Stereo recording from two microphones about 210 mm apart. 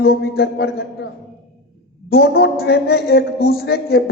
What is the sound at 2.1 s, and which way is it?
A man's voice, 50° left (ahead or behind).